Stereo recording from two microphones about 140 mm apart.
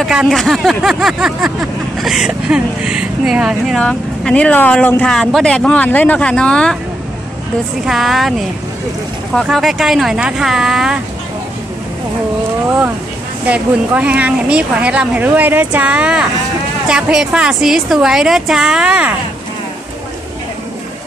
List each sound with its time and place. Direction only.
0.0 s speech: centre (ahead or behind)
7.8 s speech: centre (ahead or behind)
13.5 s speech: 10° right (ahead or behind)